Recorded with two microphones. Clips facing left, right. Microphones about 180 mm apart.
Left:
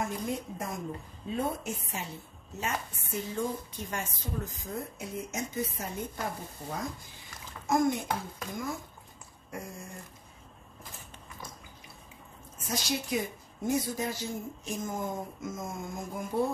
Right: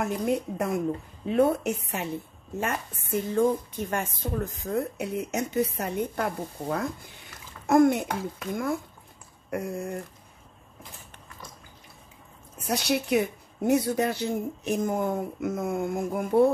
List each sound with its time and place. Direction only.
0.0 s a woman's voice: 65° right (ahead or behind)
2.5 s a woman's voice: 55° right (ahead or behind)
9.5 s a woman's voice: 65° right (ahead or behind)
12.6 s a woman's voice: 65° right (ahead or behind)